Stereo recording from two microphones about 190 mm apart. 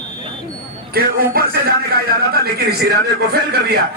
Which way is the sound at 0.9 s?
50° right (ahead or behind).